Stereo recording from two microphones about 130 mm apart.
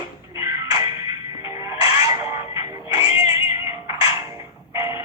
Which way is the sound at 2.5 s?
25° right (ahead or behind).